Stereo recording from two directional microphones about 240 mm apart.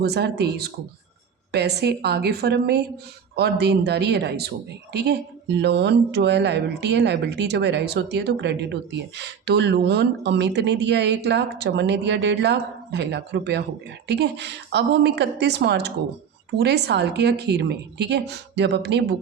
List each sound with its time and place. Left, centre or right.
0.0 s speech: right